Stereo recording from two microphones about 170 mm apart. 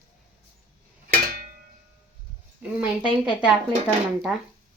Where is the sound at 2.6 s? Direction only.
10° right (ahead or behind).